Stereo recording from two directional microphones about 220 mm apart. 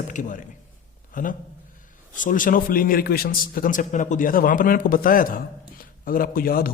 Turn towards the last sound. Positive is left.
turn(degrees=40)  # may be behind; listen again after turning